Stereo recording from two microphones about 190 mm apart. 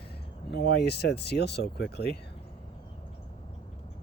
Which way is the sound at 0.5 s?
60° left (ahead or behind).